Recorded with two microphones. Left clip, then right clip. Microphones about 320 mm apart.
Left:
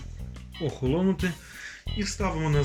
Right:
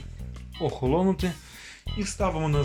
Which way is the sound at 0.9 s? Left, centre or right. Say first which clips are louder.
Right 1 dB; centre.